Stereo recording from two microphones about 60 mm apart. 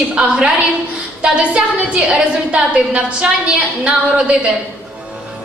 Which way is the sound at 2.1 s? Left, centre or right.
Centre.